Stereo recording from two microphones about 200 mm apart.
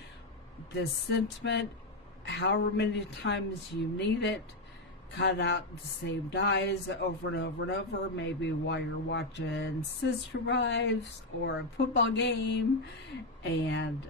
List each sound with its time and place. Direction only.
0.7 s speech: 60° left (ahead or behind)